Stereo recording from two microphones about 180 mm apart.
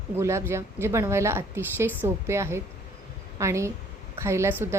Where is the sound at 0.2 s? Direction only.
15° right (ahead or behind).